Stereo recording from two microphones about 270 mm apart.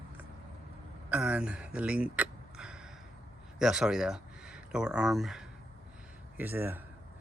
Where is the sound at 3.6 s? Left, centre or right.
Centre.